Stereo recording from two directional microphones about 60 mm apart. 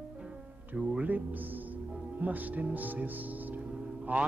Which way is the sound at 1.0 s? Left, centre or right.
Right.